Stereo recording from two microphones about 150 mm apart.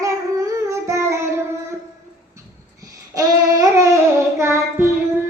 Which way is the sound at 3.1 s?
20° right (ahead or behind).